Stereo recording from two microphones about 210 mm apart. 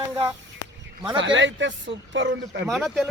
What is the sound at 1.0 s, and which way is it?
Speech, 20° right (ahead or behind).